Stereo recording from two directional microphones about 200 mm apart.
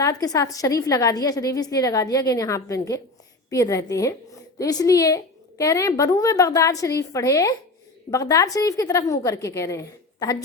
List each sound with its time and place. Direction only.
0.0 s a woman's voice: 20° left (ahead or behind)